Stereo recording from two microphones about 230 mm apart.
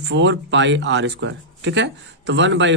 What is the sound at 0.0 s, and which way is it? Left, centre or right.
A man's voice, right.